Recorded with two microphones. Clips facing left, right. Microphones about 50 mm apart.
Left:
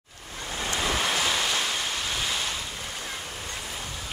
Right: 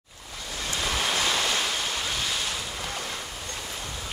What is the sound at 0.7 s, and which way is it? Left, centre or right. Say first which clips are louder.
Waves: left 1 dB; centre.